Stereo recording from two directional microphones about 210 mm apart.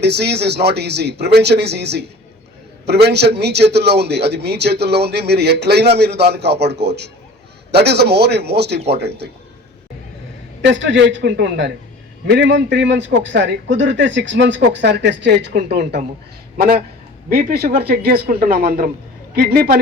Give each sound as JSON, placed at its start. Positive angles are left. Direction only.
{"t": 0.0, "sound": "a man's voice", "side_deg": -50}
{"t": 10.6, "sound": "a man's voice", "side_deg": -60}
{"t": 17.3, "sound": "a man's voice", "side_deg": -45}